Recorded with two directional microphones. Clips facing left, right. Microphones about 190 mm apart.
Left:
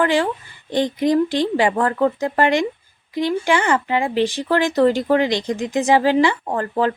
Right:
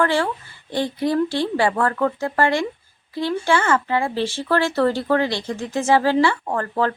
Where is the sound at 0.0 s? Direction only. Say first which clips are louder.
Left 2 dB; 15° left (ahead or behind).